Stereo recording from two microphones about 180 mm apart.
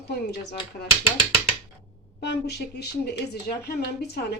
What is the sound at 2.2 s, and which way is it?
Speech, 65° left (ahead or behind).